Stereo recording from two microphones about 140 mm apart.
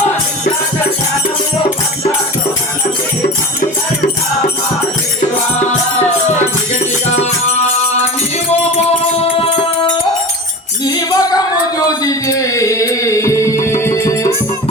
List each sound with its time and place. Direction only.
6.7 s music: 55° left (ahead or behind)
8.9 s music: 45° left (ahead or behind)
10.8 s music: 25° left (ahead or behind)